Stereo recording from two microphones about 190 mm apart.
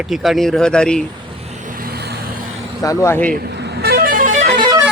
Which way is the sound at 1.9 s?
55° right (ahead or behind).